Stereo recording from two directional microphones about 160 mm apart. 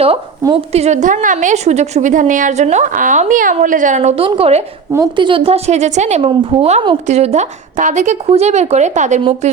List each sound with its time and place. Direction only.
0.4 s a woman's voice: 35° right (ahead or behind)